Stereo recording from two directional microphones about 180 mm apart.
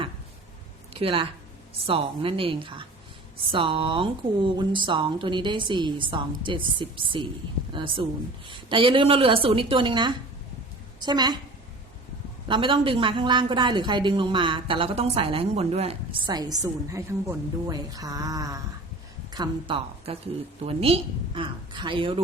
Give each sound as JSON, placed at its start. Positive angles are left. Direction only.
{"t": 0.9, "sound": "a woman's voice", "side_deg": -30}
{"t": 12.5, "sound": "a woman's voice", "side_deg": -30}